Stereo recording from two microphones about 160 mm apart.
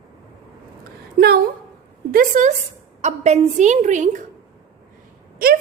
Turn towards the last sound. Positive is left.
turn(degrees=-70)  # may be behind; listen again after turning